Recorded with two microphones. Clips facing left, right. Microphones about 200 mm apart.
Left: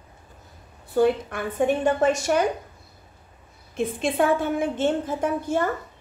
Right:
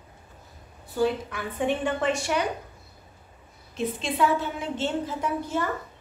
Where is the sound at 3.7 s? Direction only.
50° left (ahead or behind).